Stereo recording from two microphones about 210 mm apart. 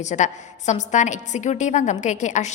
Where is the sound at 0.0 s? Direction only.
35° left (ahead or behind).